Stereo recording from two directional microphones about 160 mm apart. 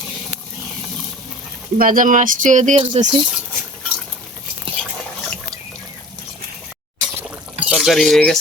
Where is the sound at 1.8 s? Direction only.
60° right (ahead or behind).